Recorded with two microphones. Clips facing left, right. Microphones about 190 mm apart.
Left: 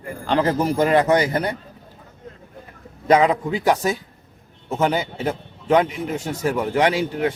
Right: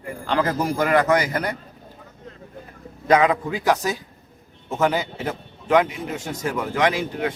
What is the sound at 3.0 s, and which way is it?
Speech, 25° left (ahead or behind).